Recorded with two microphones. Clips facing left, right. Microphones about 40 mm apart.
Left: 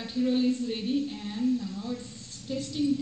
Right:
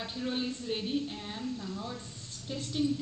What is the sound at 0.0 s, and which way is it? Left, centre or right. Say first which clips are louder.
A woman's voice: left 8 dB; centre.